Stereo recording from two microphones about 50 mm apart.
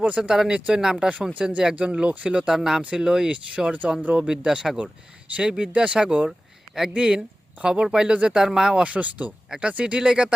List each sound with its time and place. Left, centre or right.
0.0 s speech: right
0.3 s speech: centre
2.5 s speech: centre; by 4.3 s right
4.3 s speech: centre
8.8 s speech: right
9.5 s speech: centre